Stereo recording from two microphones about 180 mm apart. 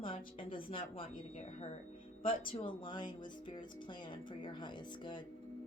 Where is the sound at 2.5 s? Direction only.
30° left (ahead or behind).